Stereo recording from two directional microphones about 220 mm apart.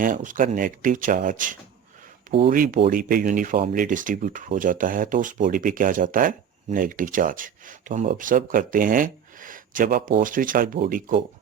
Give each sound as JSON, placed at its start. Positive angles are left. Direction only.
{"t": 0.0, "sound": "speech", "side_deg": -35}